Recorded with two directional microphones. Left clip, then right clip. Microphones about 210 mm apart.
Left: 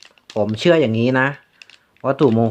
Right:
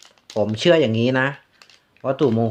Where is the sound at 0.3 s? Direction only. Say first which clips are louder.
Left 1 dB; 15° left (ahead or behind).